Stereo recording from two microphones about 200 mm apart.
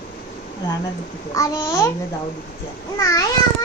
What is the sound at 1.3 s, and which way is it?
Speech, 15° left (ahead or behind).